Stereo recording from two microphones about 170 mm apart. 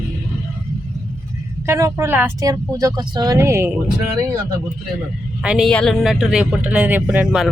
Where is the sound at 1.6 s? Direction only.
15° right (ahead or behind).